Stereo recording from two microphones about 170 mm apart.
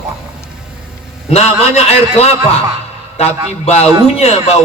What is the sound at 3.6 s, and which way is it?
Speech, 40° left (ahead or behind).